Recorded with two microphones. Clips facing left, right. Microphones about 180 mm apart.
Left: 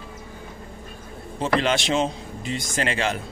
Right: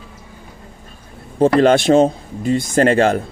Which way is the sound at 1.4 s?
50° right (ahead or behind).